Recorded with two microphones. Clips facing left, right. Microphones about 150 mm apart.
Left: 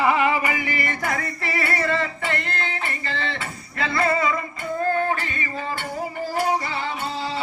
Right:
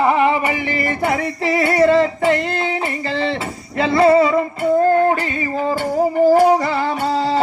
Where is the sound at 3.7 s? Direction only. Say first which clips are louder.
Right 10 dB; 30° right (ahead or behind).